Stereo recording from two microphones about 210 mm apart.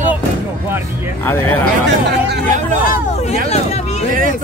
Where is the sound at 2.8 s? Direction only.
30° left (ahead or behind).